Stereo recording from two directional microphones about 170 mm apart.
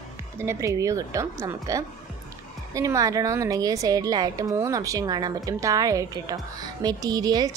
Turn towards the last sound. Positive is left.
turn(degrees=-20)  # may be behind; listen again after turning